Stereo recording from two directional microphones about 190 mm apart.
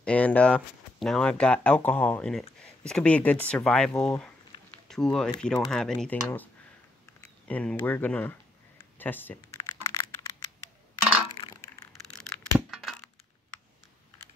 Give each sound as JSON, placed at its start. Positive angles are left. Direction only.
{"t": 0.0, "sound": "speech", "side_deg": 5}
{"t": 3.9, "sound": "speech", "side_deg": 15}
{"t": 4.8, "sound": "speech", "side_deg": 0}
{"t": 8.9, "sound": "a sound", "side_deg": 10}
{"t": 12.5, "sound": "crack", "side_deg": 0}